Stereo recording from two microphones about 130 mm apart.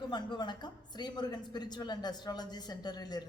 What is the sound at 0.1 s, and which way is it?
Speech, 35° left (ahead or behind).